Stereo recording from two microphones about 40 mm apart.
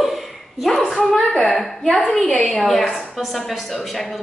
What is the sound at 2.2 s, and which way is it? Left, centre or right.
Speech, left.